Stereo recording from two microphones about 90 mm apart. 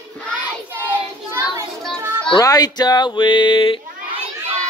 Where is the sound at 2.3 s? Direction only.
45° left (ahead or behind); by 3.7 s 65° left (ahead or behind).